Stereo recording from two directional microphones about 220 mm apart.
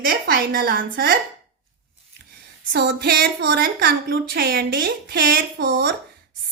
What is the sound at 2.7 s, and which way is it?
A woman's voice, 45° right (ahead or behind).